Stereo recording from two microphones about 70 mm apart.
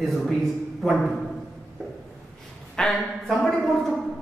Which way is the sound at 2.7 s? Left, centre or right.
Centre.